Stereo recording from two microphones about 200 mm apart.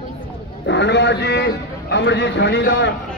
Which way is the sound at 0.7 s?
60° left (ahead or behind).